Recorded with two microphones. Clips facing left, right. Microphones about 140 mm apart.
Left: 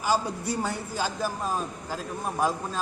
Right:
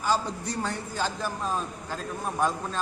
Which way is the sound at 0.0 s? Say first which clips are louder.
Left 1 dB; 10° left (ahead or behind).